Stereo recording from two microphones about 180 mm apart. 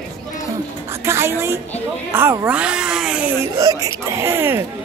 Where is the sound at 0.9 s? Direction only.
15° right (ahead or behind).